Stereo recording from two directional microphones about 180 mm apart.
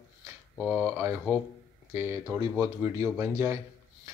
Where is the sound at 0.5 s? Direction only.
Centre (ahead or behind).